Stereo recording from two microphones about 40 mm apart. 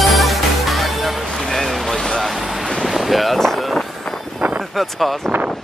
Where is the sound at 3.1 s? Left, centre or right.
Centre.